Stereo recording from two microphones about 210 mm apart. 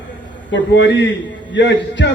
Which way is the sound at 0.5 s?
60° left (ahead or behind).